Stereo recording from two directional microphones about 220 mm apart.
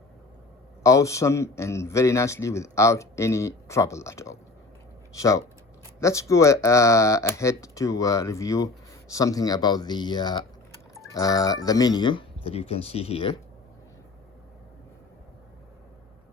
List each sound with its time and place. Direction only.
0.8 s a man's voice: 15° left (ahead or behind)